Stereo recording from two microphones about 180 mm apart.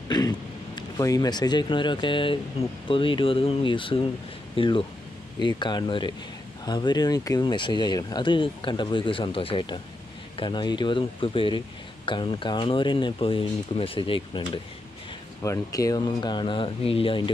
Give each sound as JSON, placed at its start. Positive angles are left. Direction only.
{"t": 0.1, "sound": "speech", "side_deg": 20}
{"t": 15.4, "sound": "speech", "side_deg": 15}